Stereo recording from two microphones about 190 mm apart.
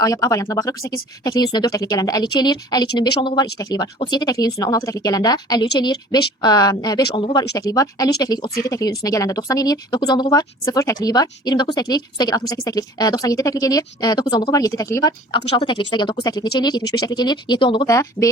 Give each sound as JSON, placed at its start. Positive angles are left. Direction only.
{"t": 0.0, "sound": "speech", "side_deg": 20}